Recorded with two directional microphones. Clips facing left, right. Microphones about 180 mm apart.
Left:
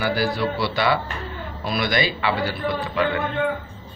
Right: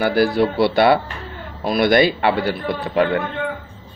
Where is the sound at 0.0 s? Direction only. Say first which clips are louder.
Right 6 dB; 55° right (ahead or behind).